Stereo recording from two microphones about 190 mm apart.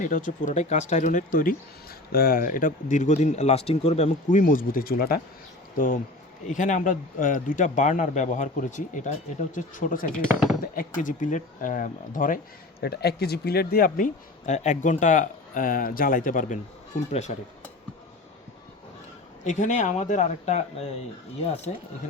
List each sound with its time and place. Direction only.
0.0 s speech: 45° left (ahead or behind)
12.8 s speech: 55° left (ahead or behind); by 17.3 s 35° left (ahead or behind)
19.5 s speech: 40° left (ahead or behind)